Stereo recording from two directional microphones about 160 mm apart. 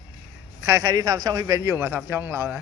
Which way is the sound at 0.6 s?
15° right (ahead or behind).